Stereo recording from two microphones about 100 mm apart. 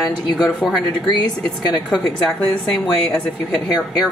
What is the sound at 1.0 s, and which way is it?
Speech, 45° left (ahead or behind).